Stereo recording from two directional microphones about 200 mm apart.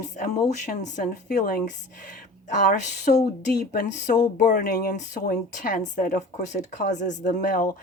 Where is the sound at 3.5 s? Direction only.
50° left (ahead or behind).